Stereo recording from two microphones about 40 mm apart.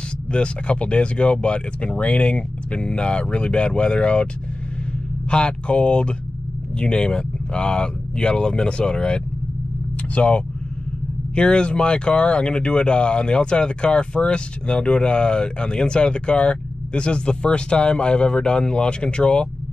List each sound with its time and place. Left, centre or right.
0.3 s speech: left
5.3 s speech: left